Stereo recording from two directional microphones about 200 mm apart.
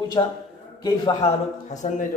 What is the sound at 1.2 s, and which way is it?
Speech, 35° left (ahead or behind).